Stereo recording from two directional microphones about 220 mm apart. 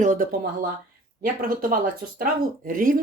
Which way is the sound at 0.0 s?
35° right (ahead or behind).